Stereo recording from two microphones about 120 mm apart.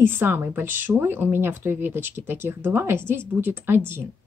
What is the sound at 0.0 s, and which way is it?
Speech, 15° right (ahead or behind).